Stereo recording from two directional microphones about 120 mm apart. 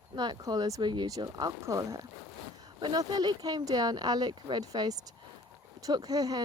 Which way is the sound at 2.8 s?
40° right (ahead or behind).